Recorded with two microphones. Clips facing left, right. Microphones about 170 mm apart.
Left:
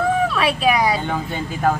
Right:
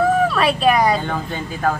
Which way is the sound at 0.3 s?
Centre (ahead or behind).